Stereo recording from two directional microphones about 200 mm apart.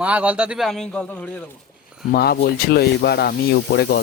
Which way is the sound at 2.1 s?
50° left (ahead or behind).